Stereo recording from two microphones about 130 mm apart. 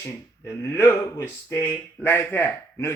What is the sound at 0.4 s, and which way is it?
Speech, 20° left (ahead or behind).